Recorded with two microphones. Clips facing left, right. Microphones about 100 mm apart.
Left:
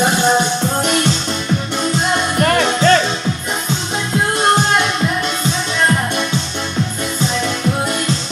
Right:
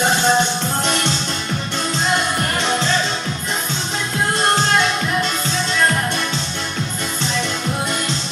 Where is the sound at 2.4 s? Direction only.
80° left.